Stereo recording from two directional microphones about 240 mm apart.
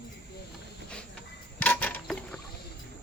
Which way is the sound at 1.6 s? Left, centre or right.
Centre.